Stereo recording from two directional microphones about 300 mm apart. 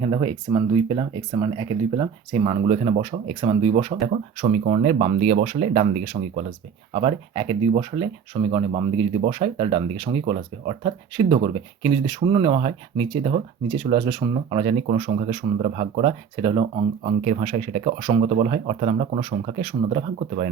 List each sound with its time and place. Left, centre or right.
0.0 s speech: centre